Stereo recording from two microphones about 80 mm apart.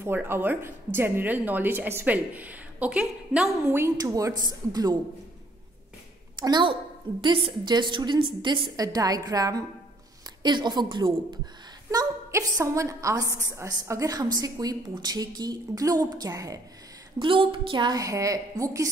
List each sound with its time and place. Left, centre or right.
0.0 s speech: right; by 3.5 s centre
3.6 s a woman's voice: right
4.0 s a woman's voice: right
6.4 s a woman's voice: right
7.2 s a woman's voice: right
8.7 s a woman's voice: right
10.4 s a woman's voice: right
11.9 s a woman's voice: right
17.2 s a woman's voice: right
17.9 s a woman's voice: right